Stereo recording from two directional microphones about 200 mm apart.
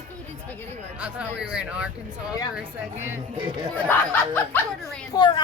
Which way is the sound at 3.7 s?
10° left (ahead or behind).